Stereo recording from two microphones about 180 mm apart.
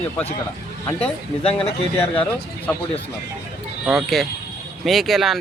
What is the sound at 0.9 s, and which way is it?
Speech, 35° left (ahead or behind).